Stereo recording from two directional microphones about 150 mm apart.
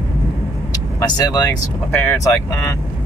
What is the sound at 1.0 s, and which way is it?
Speech, 25° left (ahead or behind).